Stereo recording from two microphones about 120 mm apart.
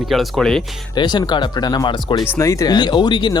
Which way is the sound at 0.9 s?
35° left (ahead or behind).